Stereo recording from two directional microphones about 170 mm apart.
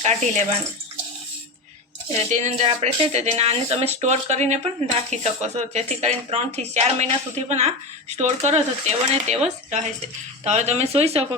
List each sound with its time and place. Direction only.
0.0 s speech: 40° right (ahead or behind)
2.1 s speech: 40° right (ahead or behind)